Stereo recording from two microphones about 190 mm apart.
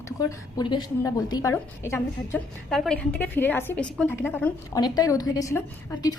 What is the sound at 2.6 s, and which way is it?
A woman's voice, centre (ahead or behind).